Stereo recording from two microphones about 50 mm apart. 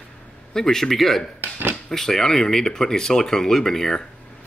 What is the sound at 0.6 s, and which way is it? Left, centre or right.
Speech, centre.